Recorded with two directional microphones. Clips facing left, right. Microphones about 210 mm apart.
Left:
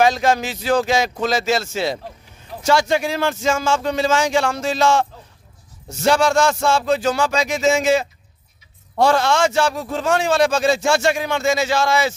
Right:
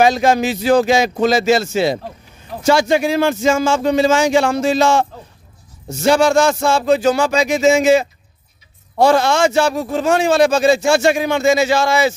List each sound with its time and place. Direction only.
0.0 s a man's voice: 5° right (ahead or behind)
6.0 s a man's voice: 5° right (ahead or behind)